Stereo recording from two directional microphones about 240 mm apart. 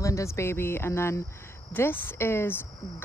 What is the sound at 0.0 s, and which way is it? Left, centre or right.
A woman's voice, centre.